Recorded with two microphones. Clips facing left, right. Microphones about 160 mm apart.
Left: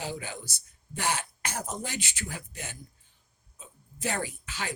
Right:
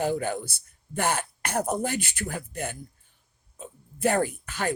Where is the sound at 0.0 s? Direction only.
50° right (ahead or behind).